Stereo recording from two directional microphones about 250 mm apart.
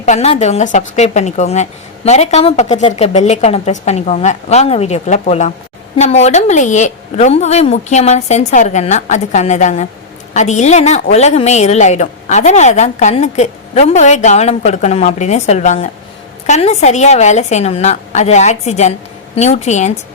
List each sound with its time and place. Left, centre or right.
0.0 s a woman's voice: left